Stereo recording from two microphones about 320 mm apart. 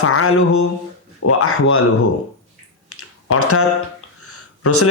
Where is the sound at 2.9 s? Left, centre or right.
Left.